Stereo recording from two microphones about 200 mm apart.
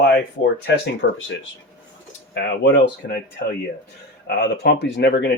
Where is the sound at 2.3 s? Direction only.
60° left (ahead or behind).